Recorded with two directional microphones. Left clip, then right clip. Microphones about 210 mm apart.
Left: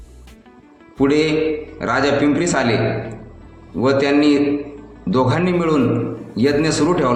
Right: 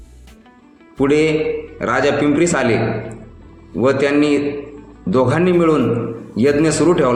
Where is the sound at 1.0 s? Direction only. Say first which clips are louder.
Right 1 dB; 30° right (ahead or behind).